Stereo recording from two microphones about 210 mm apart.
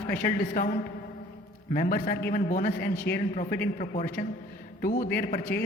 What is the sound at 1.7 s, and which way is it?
A man's voice, 40° left (ahead or behind).